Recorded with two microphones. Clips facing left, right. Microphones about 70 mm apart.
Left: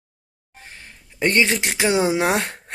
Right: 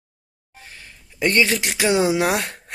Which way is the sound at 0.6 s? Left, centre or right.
Left.